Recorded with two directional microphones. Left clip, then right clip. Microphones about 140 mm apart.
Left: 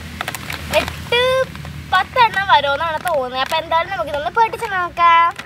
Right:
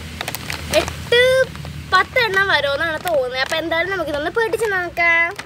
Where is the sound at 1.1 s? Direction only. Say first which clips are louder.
Right 2 dB; 35° right (ahead or behind).